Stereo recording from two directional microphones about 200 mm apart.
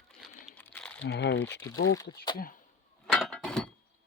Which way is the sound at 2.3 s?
45° left (ahead or behind).